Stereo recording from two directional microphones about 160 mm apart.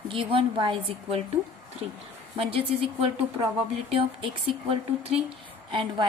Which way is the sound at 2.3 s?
35° right (ahead or behind).